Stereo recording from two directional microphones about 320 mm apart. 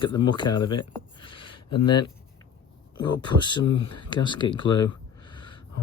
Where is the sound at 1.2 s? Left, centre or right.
Centre.